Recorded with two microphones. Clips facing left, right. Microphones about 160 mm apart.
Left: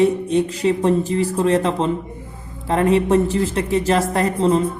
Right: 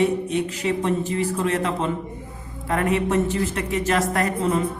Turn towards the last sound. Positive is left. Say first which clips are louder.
# left 5 dB
turn(degrees=30)  # may be behind; listen again after turning